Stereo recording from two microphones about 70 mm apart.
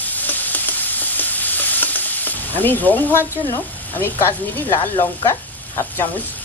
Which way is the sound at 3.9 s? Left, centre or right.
Left.